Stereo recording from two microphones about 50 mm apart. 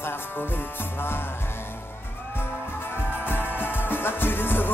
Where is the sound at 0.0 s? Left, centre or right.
Left.